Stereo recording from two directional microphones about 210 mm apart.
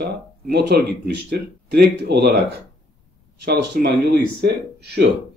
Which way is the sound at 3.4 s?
50° right (ahead or behind).